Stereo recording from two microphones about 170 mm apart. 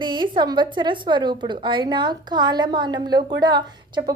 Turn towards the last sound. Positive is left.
turn(degrees=-25)  # may be behind; listen again after turning